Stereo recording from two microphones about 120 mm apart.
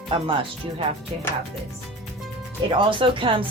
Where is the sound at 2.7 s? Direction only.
45° right (ahead or behind).